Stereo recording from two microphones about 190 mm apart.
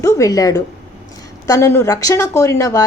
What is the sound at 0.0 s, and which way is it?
A woman's voice, 15° left (ahead or behind).